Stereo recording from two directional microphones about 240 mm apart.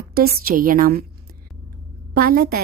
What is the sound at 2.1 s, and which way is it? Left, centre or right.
Speech, right.